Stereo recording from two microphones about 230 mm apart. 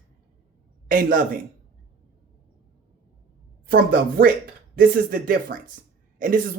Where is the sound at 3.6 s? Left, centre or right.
Right.